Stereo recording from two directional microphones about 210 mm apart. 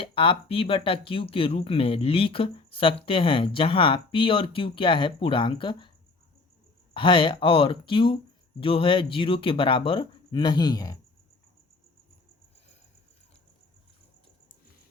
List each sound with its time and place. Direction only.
0.0 s speech: 25° left (ahead or behind)
6.9 s speech: 25° left (ahead or behind)